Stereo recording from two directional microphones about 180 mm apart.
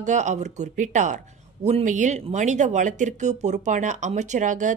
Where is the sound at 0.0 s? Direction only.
40° right (ahead or behind).